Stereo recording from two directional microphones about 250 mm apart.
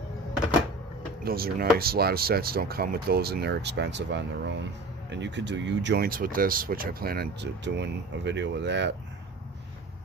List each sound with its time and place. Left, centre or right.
1.2 s speech: right